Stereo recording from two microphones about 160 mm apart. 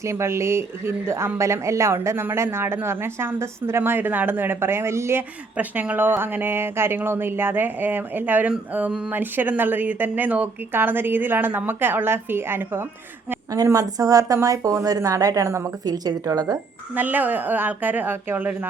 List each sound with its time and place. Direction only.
0.0 s a woman's voice: 15° right (ahead or behind)
16.9 s speech: 10° right (ahead or behind)